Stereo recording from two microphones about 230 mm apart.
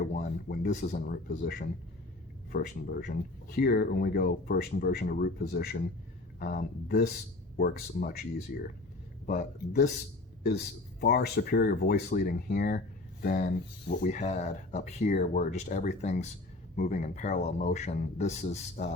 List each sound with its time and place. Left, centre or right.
0.0 s a sound: left
0.7 s speech: left
11.0 s a man's voice: left